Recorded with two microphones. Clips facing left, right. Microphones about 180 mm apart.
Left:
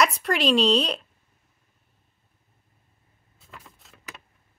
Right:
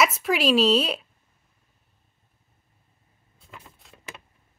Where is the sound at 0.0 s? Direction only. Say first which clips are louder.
Even; 5° right (ahead or behind).